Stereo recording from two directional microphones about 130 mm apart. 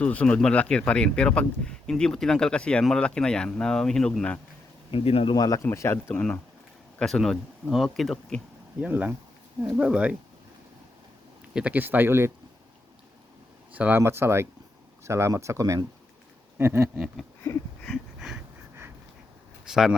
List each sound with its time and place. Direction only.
0.0 s speech: 10° left (ahead or behind)
4.9 s speech: 45° left (ahead or behind)
5.3 s speech: 30° left (ahead or behind)
7.0 s speech: centre (ahead or behind)
8.8 s speech: 15° right (ahead or behind)
11.5 s speech: 10° right (ahead or behind)
13.7 s speech: 15° right (ahead or behind)
16.6 s a sound: 20° right (ahead or behind)
17.5 s speech: 20° left (ahead or behind)
17.8 s a sound: centre (ahead or behind)
19.6 s speech: 5° right (ahead or behind)